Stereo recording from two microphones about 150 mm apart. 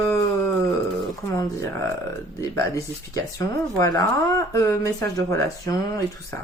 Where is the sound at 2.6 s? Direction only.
20° left (ahead or behind).